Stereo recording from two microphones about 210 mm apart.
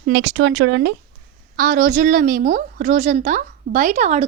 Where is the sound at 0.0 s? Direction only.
55° right (ahead or behind).